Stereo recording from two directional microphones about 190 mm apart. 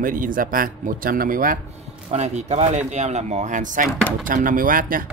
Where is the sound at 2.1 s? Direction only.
35° right (ahead or behind).